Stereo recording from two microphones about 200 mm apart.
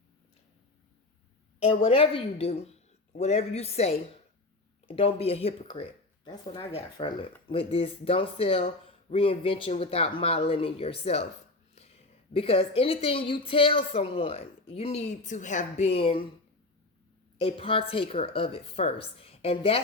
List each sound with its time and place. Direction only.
1.5 s speech: 30° left (ahead or behind)
12.3 s speech: 30° left (ahead or behind)
17.3 s speech: 25° left (ahead or behind)